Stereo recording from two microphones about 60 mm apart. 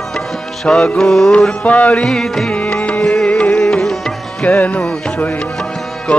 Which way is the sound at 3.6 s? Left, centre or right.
Centre.